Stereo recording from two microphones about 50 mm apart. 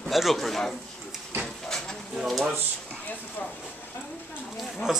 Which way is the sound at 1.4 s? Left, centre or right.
Centre.